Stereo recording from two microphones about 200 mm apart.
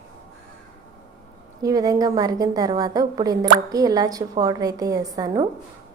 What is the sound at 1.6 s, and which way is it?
A woman's voice, 20° right (ahead or behind).